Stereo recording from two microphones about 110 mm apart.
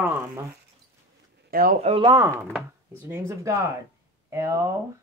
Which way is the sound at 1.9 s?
80° right.